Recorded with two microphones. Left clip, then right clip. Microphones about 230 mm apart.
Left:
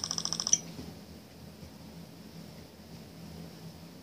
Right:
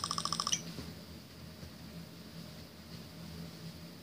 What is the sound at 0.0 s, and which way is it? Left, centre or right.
Typing, right.